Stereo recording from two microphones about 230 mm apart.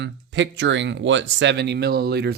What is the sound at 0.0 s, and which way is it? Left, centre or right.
Speech, right.